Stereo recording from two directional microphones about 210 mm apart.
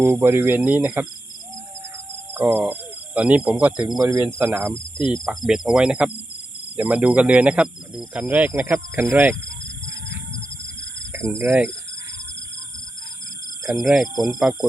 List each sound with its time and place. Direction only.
0.0 s speech: 10° right (ahead or behind)
2.3 s speech: 10° right (ahead or behind)
4.9 s cricket: 20° left (ahead or behind)
5.2 s speech: centre (ahead or behind)
11.1 s speech: 10° right (ahead or behind)
13.7 s speech: centre (ahead or behind)